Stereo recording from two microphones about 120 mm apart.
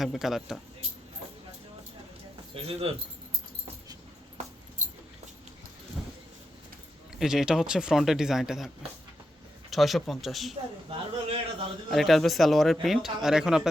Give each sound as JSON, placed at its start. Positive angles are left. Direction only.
{"t": 0.0, "sound": "speech", "side_deg": 0}
{"t": 2.6, "sound": "speech", "side_deg": -55}
{"t": 7.2, "sound": "speech", "side_deg": -5}
{"t": 10.5, "sound": "speech", "side_deg": -50}
{"t": 11.9, "sound": "speech", "side_deg": 0}